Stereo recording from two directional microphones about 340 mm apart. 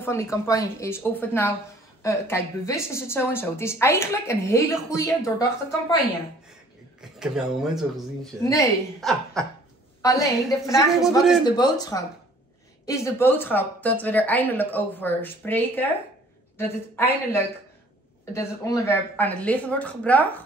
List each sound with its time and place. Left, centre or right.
0.0 s a woman's voice: centre
7.0 s a woman's voice: centre
10.9 s a woman's voice: centre
11.4 s a woman's voice: centre